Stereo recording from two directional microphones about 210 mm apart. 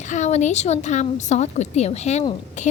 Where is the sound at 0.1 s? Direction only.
35° left (ahead or behind).